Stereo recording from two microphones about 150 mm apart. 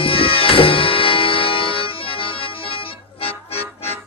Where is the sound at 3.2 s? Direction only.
40° left (ahead or behind).